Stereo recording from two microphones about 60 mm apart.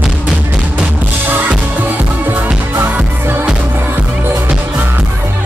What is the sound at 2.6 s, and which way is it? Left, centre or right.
Music, right.